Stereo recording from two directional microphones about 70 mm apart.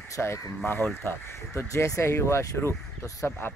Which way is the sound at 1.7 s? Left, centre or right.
Left.